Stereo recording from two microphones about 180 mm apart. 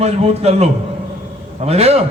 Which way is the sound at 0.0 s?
35° right (ahead or behind).